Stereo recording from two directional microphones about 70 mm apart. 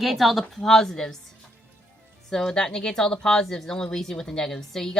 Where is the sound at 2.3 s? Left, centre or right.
Centre.